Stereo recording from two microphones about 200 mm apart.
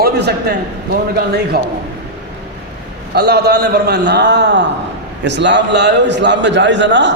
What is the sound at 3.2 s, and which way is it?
A man's voice, 55° right (ahead or behind).